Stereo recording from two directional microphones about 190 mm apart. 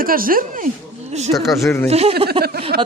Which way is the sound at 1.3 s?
Centre (ahead or behind).